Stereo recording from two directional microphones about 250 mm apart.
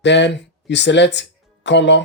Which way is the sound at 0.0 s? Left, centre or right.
Left.